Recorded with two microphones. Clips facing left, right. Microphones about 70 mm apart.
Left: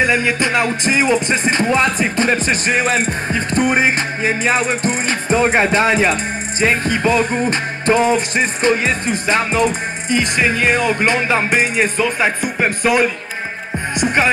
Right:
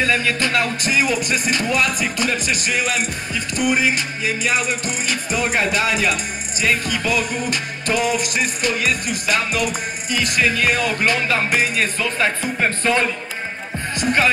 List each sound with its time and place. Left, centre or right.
0.0 s music: left